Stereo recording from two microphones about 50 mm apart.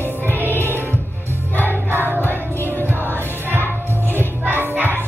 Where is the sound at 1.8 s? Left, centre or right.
Right.